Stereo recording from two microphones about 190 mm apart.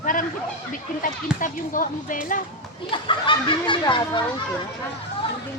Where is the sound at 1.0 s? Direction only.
45° left (ahead or behind).